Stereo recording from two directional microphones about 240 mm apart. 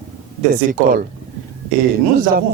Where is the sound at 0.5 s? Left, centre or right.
Right.